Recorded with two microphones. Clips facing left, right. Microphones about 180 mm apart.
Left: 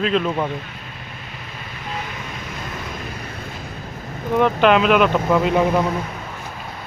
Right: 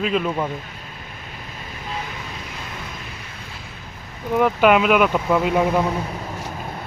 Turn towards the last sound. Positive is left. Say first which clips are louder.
# left 1 dB
turn(degrees=-5)  # may be behind; listen again after turning